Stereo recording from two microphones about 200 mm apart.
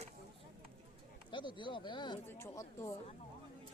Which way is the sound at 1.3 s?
25° left (ahead or behind).